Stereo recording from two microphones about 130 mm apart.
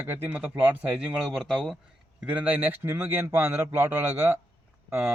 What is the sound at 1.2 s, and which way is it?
Speech, centre (ahead or behind).